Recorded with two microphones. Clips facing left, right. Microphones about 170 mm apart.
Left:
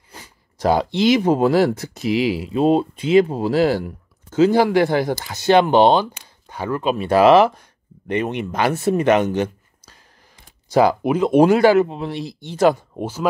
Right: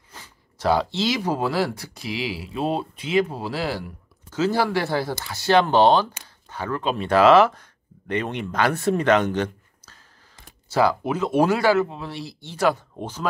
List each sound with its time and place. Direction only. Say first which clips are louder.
0.7 s a man's voice: left 7 dB; 20° left (ahead or behind)
3.4 s speech: left 10 dB; 50° left (ahead or behind)
4.4 s a man's voice: left 7 dB; 20° left (ahead or behind)
13.0 s speech: left 6 dB; 10° left (ahead or behind)